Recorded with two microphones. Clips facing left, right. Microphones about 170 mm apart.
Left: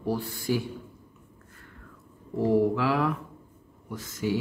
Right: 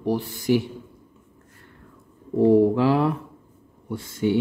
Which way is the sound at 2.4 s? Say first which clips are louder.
Right 7 dB; 30° right (ahead or behind).